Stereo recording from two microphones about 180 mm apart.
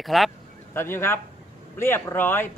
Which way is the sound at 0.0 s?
Centre (ahead or behind).